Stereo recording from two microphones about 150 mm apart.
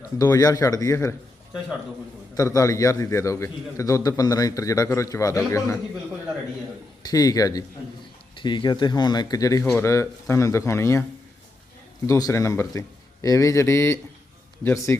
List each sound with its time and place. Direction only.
0.2 s a man's voice: 25° left (ahead or behind)
2.3 s a man's voice: 20° left (ahead or behind)
7.0 s a man's voice: 25° left (ahead or behind)
12.0 s a man's voice: 20° left (ahead or behind)